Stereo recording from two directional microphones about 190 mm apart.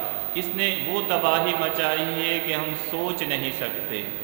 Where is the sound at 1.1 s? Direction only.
20° right (ahead or behind).